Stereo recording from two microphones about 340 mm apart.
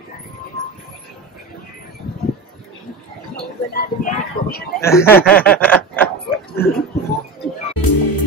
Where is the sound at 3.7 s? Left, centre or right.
Left.